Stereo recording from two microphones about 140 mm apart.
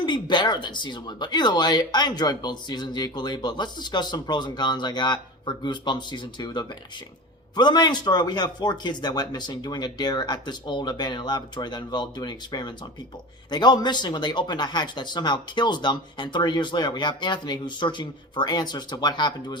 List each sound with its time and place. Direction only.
0.0 s speech: 30° left (ahead or behind)